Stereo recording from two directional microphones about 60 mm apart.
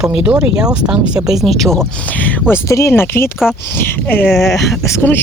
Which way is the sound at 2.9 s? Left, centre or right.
Left.